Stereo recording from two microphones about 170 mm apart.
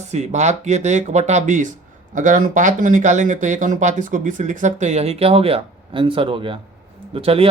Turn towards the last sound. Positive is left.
turn(degrees=-35)  # may be behind; listen again after turning